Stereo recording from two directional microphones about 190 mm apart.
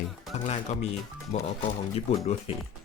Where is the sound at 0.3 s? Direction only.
35° left (ahead or behind).